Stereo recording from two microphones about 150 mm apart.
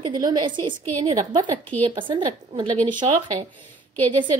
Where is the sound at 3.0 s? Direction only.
45° right (ahead or behind).